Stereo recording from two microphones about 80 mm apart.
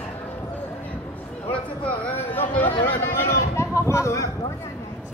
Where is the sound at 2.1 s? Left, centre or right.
Left.